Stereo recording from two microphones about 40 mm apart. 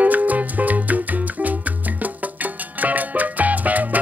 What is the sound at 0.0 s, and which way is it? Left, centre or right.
Music, right.